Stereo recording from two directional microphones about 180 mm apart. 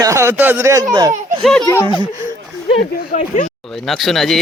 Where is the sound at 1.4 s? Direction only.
5° left (ahead or behind).